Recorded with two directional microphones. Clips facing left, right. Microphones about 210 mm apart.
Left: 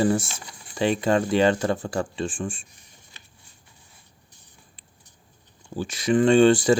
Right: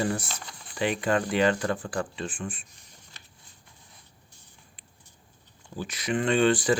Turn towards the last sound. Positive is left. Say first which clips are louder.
# left 6 dB
turn(degrees=25)  # may be behind; listen again after turning